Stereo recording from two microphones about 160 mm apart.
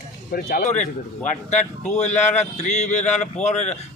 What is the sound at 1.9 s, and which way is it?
Speech, 45° left (ahead or behind).